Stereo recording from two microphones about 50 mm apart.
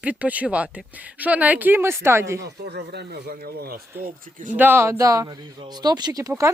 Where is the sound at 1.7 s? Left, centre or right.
Right.